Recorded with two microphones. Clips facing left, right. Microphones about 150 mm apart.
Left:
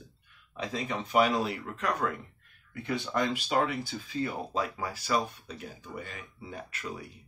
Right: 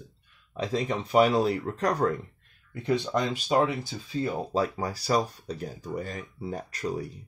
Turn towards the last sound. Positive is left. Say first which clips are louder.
# right 7 dB
turn(degrees=-40)  # may be behind; listen again after turning